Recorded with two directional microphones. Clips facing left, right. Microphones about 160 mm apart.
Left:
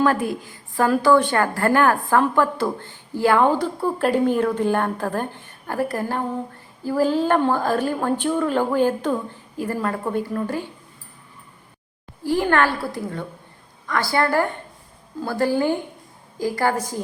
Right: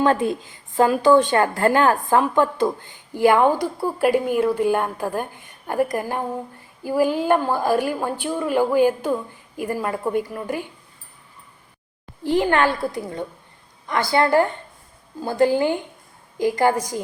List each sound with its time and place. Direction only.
0.0 s a woman's voice: 25° right (ahead or behind)
12.2 s a woman's voice: 20° right (ahead or behind)